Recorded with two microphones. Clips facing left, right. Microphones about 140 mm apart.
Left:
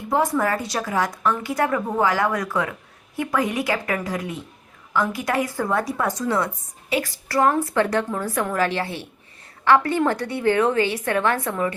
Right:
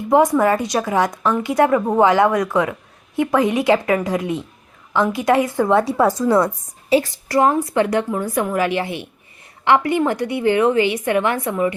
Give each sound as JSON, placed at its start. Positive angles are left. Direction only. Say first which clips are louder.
{"t": 0.1, "sound": "a woman's voice", "louder": "right 7 dB", "side_deg": -20}
{"t": 6.9, "sound": "a woman's voice", "louder": "right 6 dB", "side_deg": -25}